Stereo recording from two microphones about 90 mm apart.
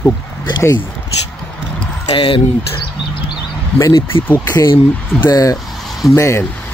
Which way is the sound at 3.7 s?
40° left (ahead or behind).